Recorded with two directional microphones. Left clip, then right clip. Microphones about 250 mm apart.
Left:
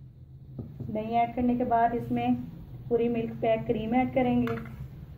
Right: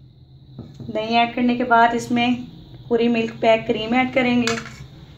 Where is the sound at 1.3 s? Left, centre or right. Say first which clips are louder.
Right 9 dB; right.